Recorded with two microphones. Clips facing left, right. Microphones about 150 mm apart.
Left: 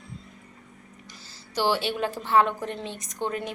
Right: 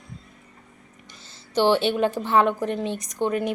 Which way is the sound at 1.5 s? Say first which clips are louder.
Right 6 dB; 20° right (ahead or behind).